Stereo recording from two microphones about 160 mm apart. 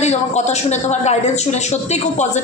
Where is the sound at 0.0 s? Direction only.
45° left (ahead or behind).